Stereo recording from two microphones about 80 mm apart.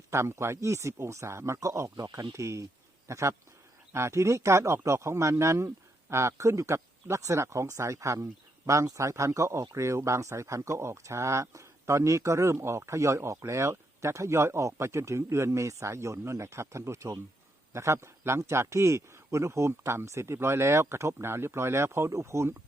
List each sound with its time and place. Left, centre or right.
0.1 s speech: right